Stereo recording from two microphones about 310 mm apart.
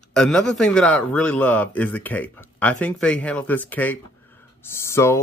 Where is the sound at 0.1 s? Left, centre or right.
Centre.